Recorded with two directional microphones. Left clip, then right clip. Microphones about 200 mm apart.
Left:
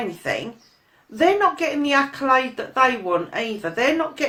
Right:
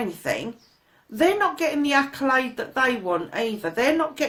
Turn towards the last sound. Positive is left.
turn(degrees=-35)  # may be behind; listen again after turning